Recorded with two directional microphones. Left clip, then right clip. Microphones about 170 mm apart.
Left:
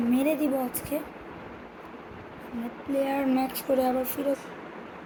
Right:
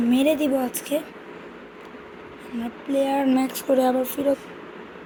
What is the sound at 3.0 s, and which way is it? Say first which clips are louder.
Speech: right 5 dB; 35° right (ahead or behind).